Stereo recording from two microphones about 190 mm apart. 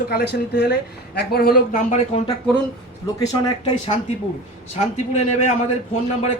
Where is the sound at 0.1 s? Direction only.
60° left (ahead or behind); by 2.3 s 35° left (ahead or behind).